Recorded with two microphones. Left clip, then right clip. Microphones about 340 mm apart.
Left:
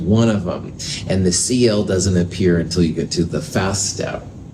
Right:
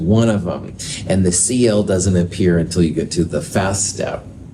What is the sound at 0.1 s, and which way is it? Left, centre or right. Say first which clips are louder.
Speech: right 1 dB; right.